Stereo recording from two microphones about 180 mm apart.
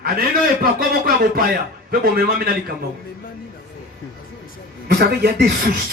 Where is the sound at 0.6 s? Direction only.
55° right (ahead or behind).